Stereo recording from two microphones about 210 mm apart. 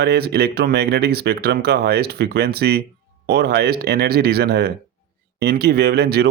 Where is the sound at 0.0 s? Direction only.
50° right (ahead or behind).